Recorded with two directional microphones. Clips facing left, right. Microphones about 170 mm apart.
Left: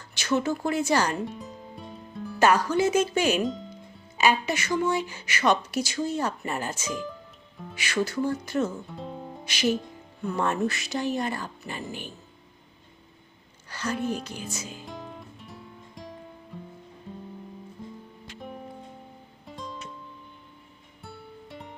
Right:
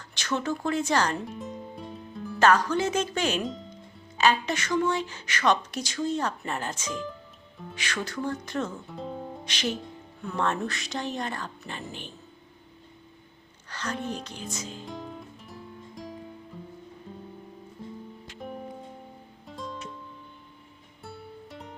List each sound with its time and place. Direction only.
0.1 s speech: 10° left (ahead or behind)
13.7 s music: 10° left (ahead or behind)
19.5 s music: centre (ahead or behind)
21.0 s music: centre (ahead or behind)